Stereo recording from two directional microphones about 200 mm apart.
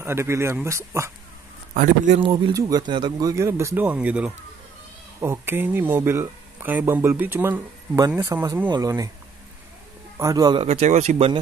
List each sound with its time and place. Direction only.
0.0 s speech: 15° right (ahead or behind)
1.7 s speech: 40° right (ahead or behind)
2.1 s speech: 25° right (ahead or behind)
10.1 s a man's voice: 15° right (ahead or behind)
10.7 s speech: 35° right (ahead or behind)